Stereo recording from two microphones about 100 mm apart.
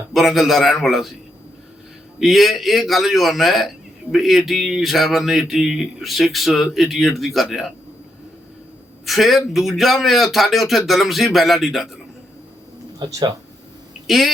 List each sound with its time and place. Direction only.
0.1 s speech: centre (ahead or behind)
2.2 s speech: centre (ahead or behind)
9.0 s speech: centre (ahead or behind)
13.1 s speech: 35° right (ahead or behind)